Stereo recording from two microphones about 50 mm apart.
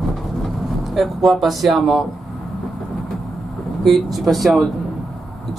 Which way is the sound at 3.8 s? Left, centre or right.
Centre.